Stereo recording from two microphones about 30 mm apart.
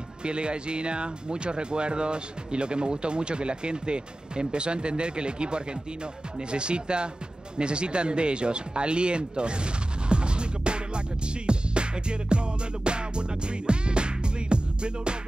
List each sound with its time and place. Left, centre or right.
0.2 s speech: right